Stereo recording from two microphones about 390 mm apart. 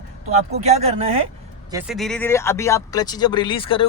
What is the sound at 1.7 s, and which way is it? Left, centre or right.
Speech, centre.